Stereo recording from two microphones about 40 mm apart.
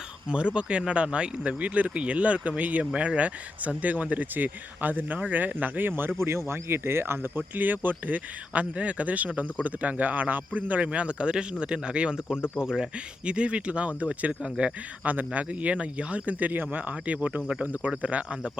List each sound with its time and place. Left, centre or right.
0.3 s speech: right
7.5 s speech: right
10.8 s speech: right
13.3 s speech: right
16.9 s speech: right